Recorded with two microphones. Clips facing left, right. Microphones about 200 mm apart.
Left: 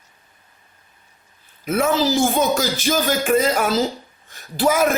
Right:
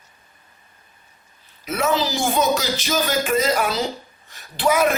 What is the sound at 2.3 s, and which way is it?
Music, 50° left (ahead or behind).